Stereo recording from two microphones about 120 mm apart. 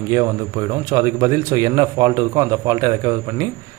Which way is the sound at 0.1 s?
30° right (ahead or behind).